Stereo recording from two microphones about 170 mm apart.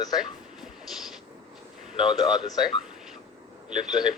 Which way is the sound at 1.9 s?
25° left (ahead or behind).